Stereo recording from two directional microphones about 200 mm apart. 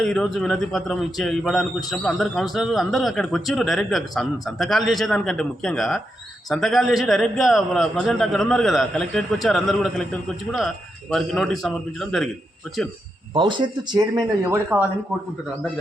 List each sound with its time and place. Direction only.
0.0 s a man's voice: 5° left (ahead or behind)
13.3 s speech: 25° right (ahead or behind)
14.5 s a man's voice: 10° right (ahead or behind)